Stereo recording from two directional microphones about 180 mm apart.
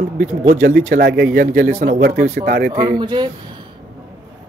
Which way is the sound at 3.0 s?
25° right (ahead or behind).